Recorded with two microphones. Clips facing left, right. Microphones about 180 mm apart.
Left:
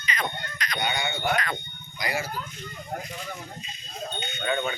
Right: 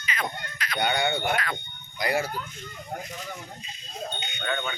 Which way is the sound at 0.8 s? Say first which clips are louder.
Right 4 dB; 60° right (ahead or behind).